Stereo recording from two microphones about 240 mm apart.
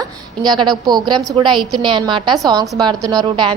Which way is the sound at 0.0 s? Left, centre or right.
Centre.